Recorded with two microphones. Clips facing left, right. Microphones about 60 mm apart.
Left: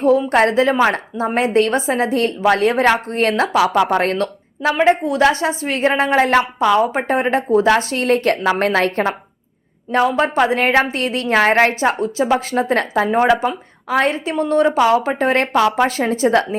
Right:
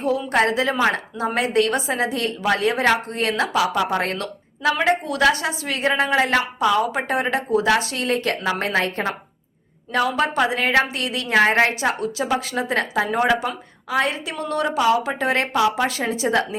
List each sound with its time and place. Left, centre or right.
0.3 s a woman's voice: left
4.8 s a woman's voice: left
10.1 s a woman's voice: left